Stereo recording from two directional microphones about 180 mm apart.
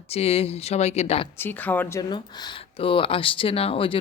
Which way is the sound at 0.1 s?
35° left (ahead or behind).